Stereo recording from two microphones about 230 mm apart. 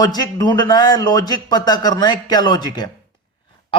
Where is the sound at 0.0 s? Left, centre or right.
Centre.